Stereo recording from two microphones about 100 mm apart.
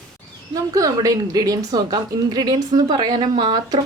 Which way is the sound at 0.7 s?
40° right (ahead or behind).